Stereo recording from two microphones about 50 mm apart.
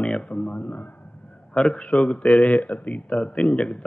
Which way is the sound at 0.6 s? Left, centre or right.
Left.